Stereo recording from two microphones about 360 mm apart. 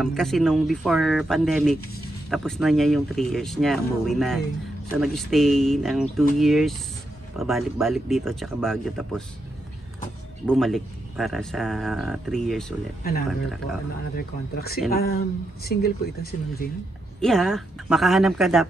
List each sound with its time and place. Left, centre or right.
0.0 s speech: centre
10.4 s speech: centre
14.1 s speech: left
17.2 s speech: centre